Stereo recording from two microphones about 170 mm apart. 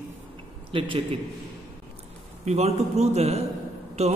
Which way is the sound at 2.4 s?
40° right (ahead or behind).